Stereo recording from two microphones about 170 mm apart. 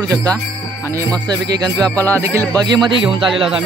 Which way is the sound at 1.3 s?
25° right (ahead or behind).